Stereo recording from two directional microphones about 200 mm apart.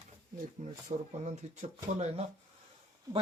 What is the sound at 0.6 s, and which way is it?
Speech, 35° right (ahead or behind).